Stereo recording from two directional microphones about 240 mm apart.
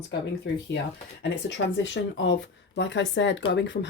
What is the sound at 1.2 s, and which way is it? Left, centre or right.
A woman's voice, left.